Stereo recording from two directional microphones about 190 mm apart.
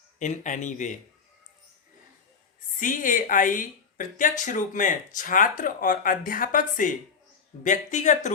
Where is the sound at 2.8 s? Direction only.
45° left (ahead or behind).